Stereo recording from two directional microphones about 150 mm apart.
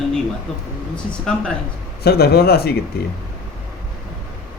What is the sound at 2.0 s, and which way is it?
Speech, 90° left.